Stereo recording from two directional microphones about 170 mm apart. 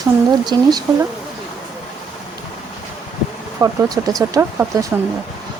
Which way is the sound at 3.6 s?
20° right (ahead or behind).